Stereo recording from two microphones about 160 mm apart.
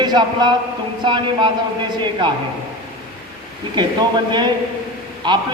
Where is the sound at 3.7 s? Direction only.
30° right (ahead or behind).